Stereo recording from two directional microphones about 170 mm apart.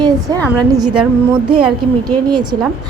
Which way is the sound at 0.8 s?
5° right (ahead or behind).